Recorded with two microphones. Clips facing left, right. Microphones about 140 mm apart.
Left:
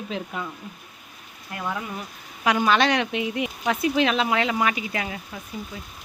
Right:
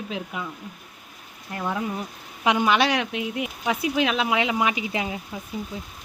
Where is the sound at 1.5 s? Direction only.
20° right (ahead or behind).